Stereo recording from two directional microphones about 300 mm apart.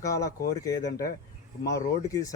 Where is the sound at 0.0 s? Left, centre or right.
Centre.